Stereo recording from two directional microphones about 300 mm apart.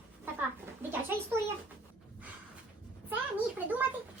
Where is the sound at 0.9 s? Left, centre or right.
Centre.